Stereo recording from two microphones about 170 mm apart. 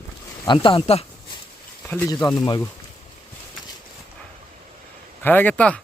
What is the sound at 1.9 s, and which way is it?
Speech, 10° left (ahead or behind).